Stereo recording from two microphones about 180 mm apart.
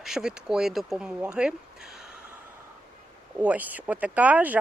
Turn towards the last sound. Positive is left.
turn(degrees=-10)  # may be behind; listen again after turning